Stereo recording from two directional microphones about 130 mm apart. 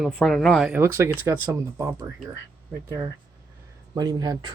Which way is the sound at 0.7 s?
20° right (ahead or behind).